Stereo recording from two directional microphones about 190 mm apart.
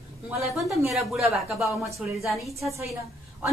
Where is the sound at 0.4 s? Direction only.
Centre (ahead or behind).